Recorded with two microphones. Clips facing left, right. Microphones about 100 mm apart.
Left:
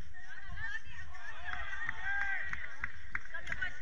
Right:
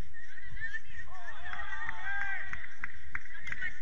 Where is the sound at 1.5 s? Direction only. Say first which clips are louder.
Right 2 dB; 15° right (ahead or behind).